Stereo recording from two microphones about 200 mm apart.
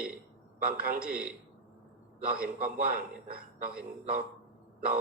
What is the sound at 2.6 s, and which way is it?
A man's voice, 45° right (ahead or behind).